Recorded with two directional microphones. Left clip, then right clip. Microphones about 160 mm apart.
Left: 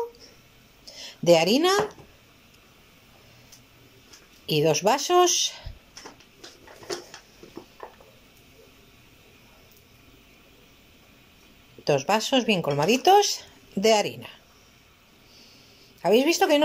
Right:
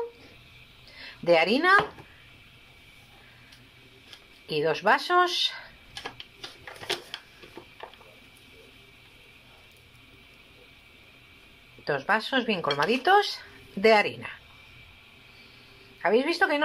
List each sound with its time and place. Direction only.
0.8 s a sound: 35° left (ahead or behind)
4.5 s speech: 35° left (ahead or behind)
11.8 s speech: 35° left (ahead or behind)
16.0 s speech: 35° left (ahead or behind)